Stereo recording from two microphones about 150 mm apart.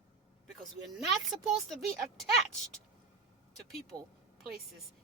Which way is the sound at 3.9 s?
30° right (ahead or behind).